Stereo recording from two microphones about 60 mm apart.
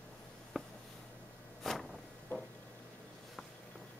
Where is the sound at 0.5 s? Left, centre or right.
Centre.